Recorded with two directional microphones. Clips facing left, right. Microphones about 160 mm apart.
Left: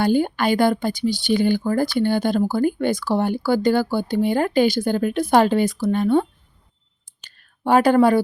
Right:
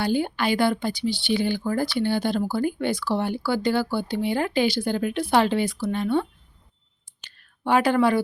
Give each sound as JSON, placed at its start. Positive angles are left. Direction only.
{"t": 0.0, "sound": "speech", "side_deg": 50}
{"t": 7.3, "sound": "a woman's voice", "side_deg": 40}